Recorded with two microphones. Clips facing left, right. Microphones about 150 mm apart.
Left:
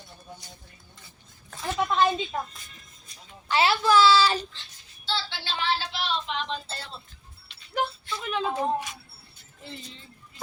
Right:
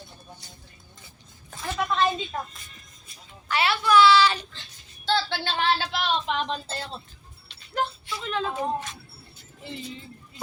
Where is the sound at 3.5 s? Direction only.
30° left (ahead or behind).